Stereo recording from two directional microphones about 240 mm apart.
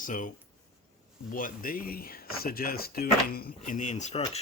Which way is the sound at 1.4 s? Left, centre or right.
Left.